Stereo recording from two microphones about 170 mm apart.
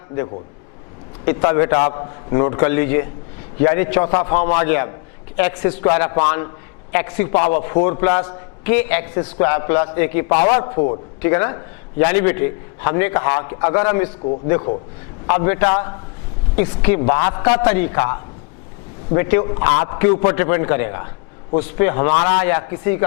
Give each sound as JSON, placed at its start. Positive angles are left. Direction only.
{"t": 1.2, "sound": "a man's voice", "side_deg": 20}
{"t": 10.6, "sound": "a man's voice", "side_deg": 30}
{"t": 11.2, "sound": "a man's voice", "side_deg": 15}
{"t": 15.3, "sound": "a man's voice", "side_deg": 15}
{"t": 22.4, "sound": "a man's voice", "side_deg": 15}